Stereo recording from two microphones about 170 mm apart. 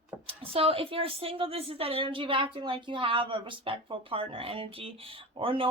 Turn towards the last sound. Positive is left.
turn(degrees=-30)  # may be behind; listen again after turning